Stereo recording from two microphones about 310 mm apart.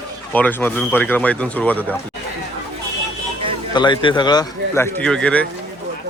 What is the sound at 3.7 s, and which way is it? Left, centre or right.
A man's voice, centre.